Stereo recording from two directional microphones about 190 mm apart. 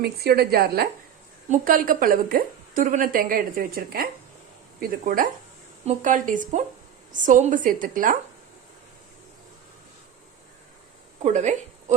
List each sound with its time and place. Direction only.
0.0 s a woman's voice: 55° right (ahead or behind)
11.2 s a woman's voice: 35° right (ahead or behind)